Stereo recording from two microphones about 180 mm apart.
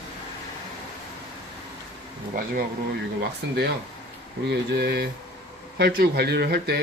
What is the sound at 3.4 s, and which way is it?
Speech, 70° right (ahead or behind).